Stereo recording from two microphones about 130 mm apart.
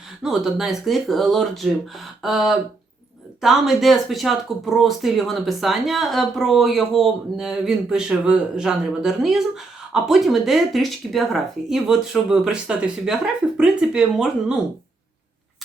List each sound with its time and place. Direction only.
0.2 s speech: 5° right (ahead or behind)